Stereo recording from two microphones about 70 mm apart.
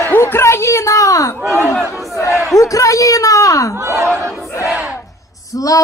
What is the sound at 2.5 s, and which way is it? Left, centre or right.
A woman's voice, left.